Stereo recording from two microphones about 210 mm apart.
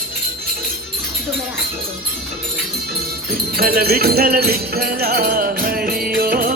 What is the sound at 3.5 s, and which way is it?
Music, 45° right (ahead or behind).